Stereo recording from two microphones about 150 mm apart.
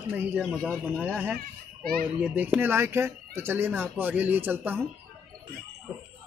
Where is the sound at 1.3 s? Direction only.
80° right.